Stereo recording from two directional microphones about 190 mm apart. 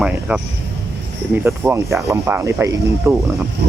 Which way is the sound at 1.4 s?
15° right (ahead or behind).